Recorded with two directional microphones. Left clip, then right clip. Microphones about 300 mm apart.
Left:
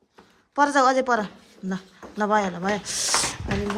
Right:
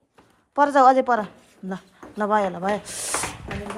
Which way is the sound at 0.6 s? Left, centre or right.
Centre.